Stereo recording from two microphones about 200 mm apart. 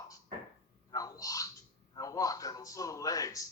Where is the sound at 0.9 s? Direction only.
15° left (ahead or behind).